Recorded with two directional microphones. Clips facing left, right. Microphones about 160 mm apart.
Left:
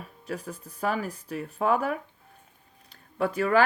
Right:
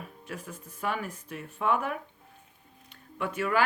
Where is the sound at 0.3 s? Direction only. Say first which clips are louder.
Left 7 dB; 35° left (ahead or behind).